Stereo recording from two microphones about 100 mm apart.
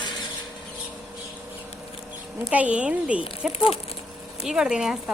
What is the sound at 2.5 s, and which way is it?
Speech, 15° right (ahead or behind).